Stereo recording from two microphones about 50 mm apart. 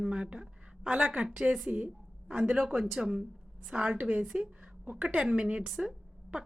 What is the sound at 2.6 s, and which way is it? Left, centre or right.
A woman's voice, centre.